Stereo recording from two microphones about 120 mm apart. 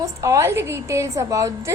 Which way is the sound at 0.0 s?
25° right (ahead or behind).